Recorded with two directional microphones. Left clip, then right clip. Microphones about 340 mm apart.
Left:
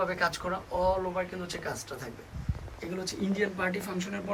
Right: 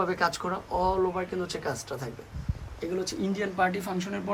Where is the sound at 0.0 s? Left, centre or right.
Centre.